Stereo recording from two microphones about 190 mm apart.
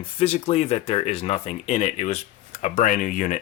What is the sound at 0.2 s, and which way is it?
Speech, 30° left (ahead or behind).